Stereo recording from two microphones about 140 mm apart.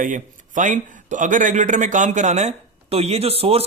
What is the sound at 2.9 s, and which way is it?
Speech, 45° right (ahead or behind).